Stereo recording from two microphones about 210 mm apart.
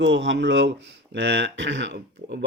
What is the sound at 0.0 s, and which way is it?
Speech, 60° right (ahead or behind).